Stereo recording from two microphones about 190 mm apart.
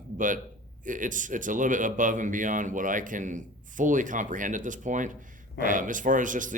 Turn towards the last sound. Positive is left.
turn(degrees=-45)  # may be behind; listen again after turning